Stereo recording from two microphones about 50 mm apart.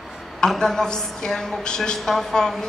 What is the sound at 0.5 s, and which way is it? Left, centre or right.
A woman's voice, centre.